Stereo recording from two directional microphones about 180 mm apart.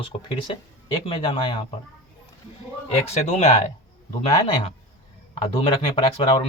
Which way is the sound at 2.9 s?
35° left (ahead or behind).